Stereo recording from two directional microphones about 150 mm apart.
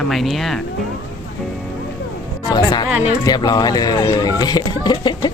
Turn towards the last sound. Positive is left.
turn(degrees=30)  # may be behind; listen again after turning